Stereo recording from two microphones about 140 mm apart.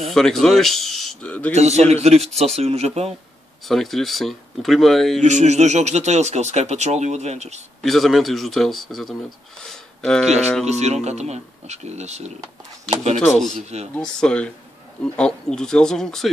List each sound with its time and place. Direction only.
0.0 s speech: 5° left (ahead or behind)
1.5 s speech: 50° right (ahead or behind)
3.6 s speech: centre (ahead or behind)
5.2 s speech: 55° right (ahead or behind)
7.8 s speech: centre (ahead or behind)
9.6 s a sound: 5° left (ahead or behind)
10.6 s speech: 50° right (ahead or behind)
13.2 s speech: 5° left (ahead or behind)
13.6 s speech: 50° right (ahead or behind)
13.9 s speech: 5° left (ahead or behind)